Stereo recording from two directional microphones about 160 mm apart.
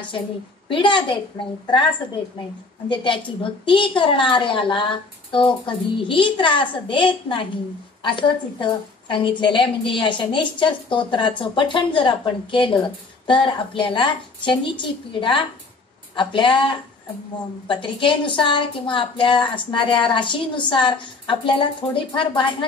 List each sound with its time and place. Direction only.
0.7 s a woman's voice: 30° left (ahead or behind)